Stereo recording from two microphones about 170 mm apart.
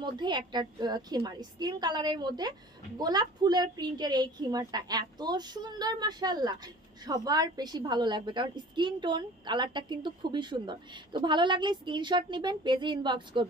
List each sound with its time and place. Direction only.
0.0 s a woman's voice: 25° right (ahead or behind)